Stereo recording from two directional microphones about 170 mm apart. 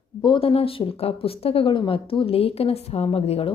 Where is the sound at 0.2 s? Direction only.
30° left (ahead or behind).